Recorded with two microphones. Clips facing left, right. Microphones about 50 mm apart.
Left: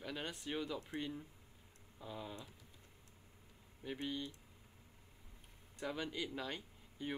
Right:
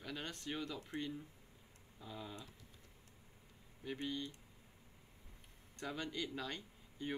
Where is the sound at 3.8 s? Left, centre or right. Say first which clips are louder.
Even; centre.